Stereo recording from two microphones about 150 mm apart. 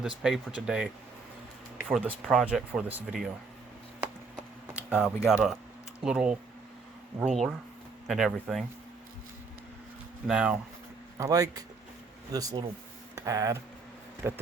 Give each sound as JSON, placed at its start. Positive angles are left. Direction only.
{"t": 0.0, "sound": "speech", "side_deg": -5}
{"t": 1.9, "sound": "speech", "side_deg": -5}
{"t": 4.7, "sound": "speech", "side_deg": -5}
{"t": 10.2, "sound": "speech", "side_deg": -5}
{"t": 11.2, "sound": "speech", "side_deg": -25}
{"t": 13.1, "sound": "a sound", "side_deg": -20}
{"t": 14.2, "sound": "speech", "side_deg": -15}